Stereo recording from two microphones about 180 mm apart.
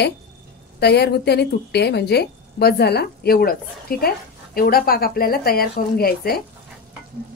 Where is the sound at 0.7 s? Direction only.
65° left (ahead or behind).